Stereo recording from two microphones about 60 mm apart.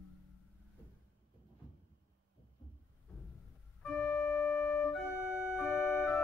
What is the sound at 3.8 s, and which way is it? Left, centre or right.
Organ, left.